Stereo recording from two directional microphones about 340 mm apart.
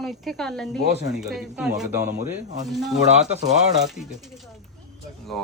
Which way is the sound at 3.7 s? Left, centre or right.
Centre.